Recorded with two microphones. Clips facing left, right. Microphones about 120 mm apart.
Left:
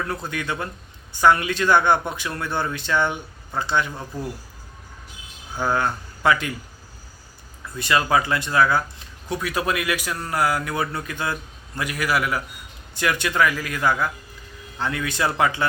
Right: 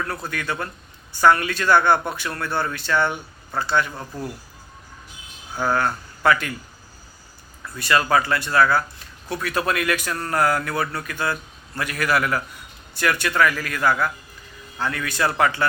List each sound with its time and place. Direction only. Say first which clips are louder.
0.0 s a man's voice: even; 20° left (ahead or behind)
5.5 s speech: right 1 dB; 20° left (ahead or behind)
7.8 s a man's voice: right 1 dB; 20° left (ahead or behind)